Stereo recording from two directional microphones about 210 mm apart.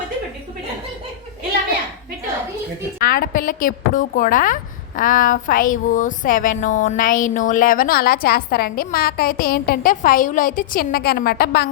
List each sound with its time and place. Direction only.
3.0 s a woman's voice: 45° left (ahead or behind)